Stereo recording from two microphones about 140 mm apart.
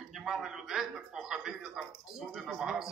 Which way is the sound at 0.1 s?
Centre (ahead or behind).